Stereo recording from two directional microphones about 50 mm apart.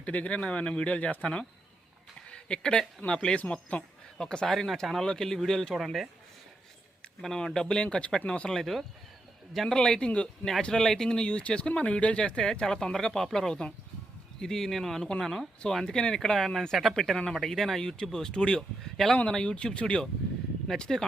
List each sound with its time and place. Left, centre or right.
0.0 s speech: left
2.3 s speech: centre
3.4 s speech: left
4.2 s speech: centre
5.7 s speech: centre
7.2 s speech: centre
8.4 s speech: centre